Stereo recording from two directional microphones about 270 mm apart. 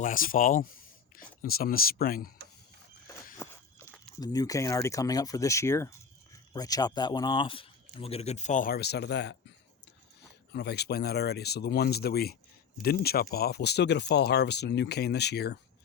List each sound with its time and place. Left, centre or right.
0.0 s speech: left
3.3 s walk: centre
4.2 s speech: centre; by 9.4 s left
10.5 s speech: left